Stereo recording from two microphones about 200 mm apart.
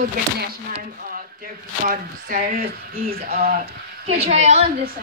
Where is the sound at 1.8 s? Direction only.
45° right (ahead or behind).